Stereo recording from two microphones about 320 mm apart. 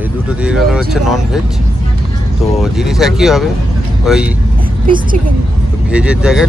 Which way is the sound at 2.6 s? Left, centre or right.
Centre.